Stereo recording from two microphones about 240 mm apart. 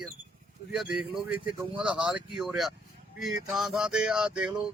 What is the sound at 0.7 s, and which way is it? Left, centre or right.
Speech, centre.